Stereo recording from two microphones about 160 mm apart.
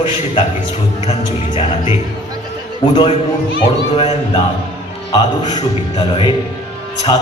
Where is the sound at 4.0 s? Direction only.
35° left (ahead or behind).